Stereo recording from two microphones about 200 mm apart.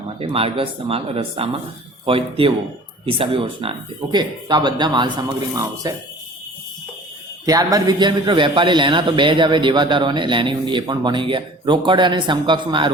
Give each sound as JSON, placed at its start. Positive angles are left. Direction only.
{"t": 0.2, "sound": "a man's voice", "side_deg": -30}
{"t": 7.4, "sound": "a man's voice", "side_deg": -20}